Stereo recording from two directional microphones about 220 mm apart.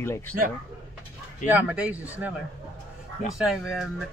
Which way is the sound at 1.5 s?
10° right (ahead or behind).